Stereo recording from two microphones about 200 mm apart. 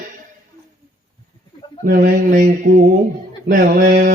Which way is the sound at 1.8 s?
45° right (ahead or behind).